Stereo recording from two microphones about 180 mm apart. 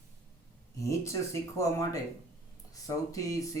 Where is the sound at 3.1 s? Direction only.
20° left (ahead or behind).